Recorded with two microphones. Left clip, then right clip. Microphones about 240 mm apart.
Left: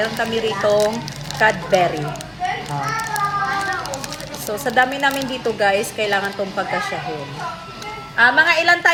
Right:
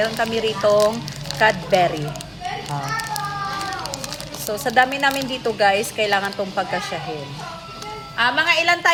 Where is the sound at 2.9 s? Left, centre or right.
Centre.